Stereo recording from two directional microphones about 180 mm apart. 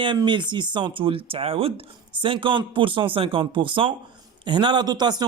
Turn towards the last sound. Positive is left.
turn(degrees=-20)  # may be behind; listen again after turning